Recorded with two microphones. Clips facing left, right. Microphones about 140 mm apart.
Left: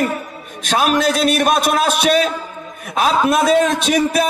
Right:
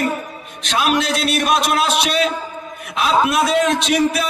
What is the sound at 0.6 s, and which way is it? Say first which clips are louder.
A man's voice: left 3 dB; 45° left (ahead or behind).